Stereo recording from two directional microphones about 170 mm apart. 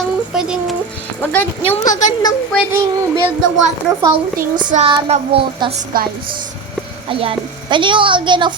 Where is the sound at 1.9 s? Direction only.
45° left (ahead or behind).